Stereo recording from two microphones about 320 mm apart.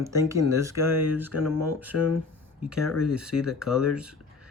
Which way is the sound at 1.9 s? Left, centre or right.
Left.